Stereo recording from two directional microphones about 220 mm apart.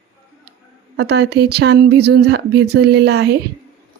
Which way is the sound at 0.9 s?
50° right (ahead or behind).